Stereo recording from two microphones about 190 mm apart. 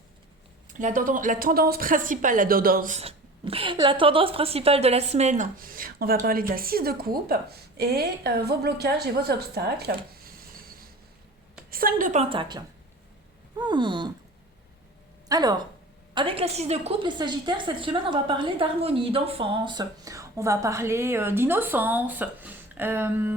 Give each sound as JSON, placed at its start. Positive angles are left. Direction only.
{"t": 0.7, "sound": "a woman's voice", "side_deg": -45}
{"t": 15.3, "sound": "a woman's voice", "side_deg": -20}